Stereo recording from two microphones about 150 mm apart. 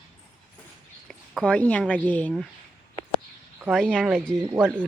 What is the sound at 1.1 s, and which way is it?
Speech, 5° left (ahead or behind).